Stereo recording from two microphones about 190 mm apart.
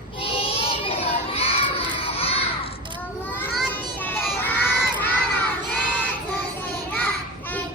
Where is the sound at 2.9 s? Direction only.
10° left (ahead or behind).